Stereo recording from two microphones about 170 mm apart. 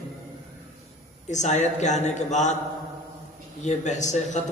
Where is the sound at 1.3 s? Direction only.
45° left (ahead or behind).